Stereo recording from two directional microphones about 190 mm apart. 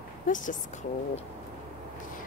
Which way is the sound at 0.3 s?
40° left (ahead or behind).